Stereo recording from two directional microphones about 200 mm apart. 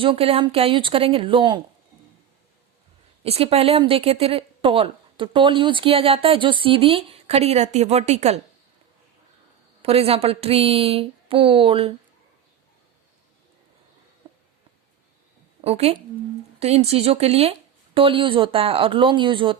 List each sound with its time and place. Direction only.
0.0 s a woman's voice: 30° right (ahead or behind)
3.2 s a woman's voice: 30° right (ahead or behind)
9.8 s a woman's voice: 30° right (ahead or behind)
14.2 s a sound: 25° right (ahead or behind)
15.6 s a woman's voice: 30° right (ahead or behind)